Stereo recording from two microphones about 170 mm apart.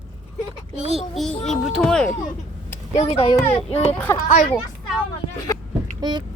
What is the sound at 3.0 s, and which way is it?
Speech, 40° left (ahead or behind).